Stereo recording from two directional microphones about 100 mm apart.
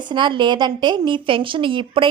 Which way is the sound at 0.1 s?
50° right (ahead or behind).